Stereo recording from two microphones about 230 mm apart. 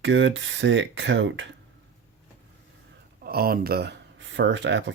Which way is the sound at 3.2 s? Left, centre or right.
Right.